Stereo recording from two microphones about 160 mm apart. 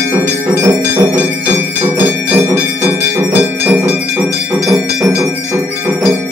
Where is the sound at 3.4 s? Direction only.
10° right (ahead or behind).